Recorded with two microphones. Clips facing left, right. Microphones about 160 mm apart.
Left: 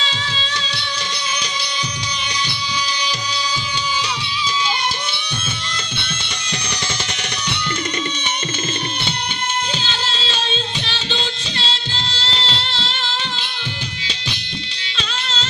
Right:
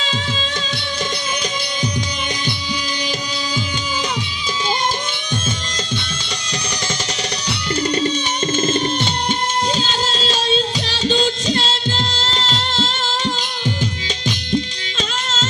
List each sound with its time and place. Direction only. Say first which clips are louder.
9.7 s music: right 5 dB; 40° right (ahead or behind)
14.3 s music: right 14 dB; 45° right (ahead or behind)